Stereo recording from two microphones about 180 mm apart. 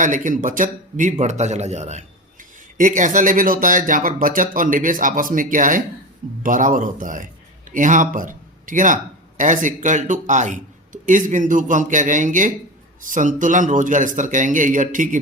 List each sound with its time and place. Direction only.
0.0 s a man's voice: 45° right (ahead or behind)